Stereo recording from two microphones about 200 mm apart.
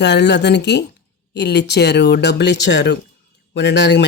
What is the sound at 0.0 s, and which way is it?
Speech, 60° left (ahead or behind).